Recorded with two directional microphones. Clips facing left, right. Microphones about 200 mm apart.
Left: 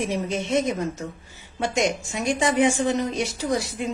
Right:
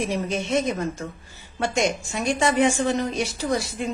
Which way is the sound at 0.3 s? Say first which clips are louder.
Even; 20° left (ahead or behind).